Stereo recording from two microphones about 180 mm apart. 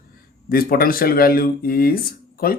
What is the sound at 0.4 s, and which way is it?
Speech, 55° left (ahead or behind).